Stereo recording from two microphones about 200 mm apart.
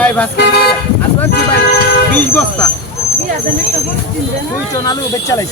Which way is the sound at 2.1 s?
5° left (ahead or behind).